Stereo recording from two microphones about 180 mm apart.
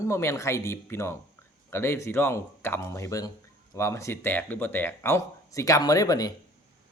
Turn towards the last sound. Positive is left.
turn(degrees=20)  # may be behind; listen again after turning